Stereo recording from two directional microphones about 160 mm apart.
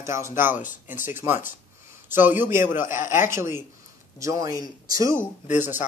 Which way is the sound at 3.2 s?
15° right (ahead or behind).